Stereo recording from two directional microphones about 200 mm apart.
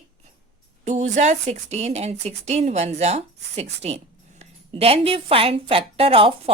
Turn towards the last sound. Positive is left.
turn(degrees=-25)  # may be behind; listen again after turning